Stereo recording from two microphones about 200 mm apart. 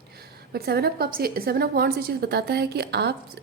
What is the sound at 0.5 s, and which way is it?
A woman's voice, 50° right (ahead or behind).